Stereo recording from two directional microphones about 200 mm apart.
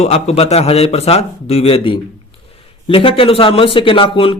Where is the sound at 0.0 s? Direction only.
30° left (ahead or behind).